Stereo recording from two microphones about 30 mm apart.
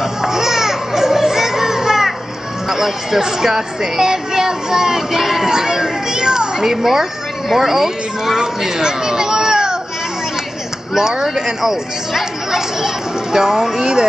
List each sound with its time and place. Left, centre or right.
0.0 s a sound: centre
2.7 s speech: centre
8.4 s a child's voice: right
11.0 s speech: centre